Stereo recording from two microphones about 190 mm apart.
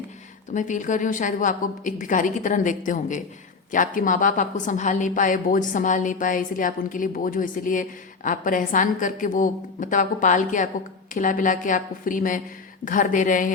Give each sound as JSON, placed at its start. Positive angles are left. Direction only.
{"t": 0.5, "sound": "a woman's voice", "side_deg": 40}